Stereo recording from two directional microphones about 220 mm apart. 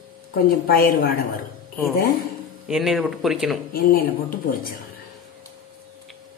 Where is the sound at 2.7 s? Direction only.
Centre (ahead or behind).